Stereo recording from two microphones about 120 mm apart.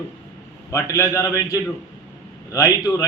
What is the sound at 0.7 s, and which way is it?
A man's voice, 25° left (ahead or behind).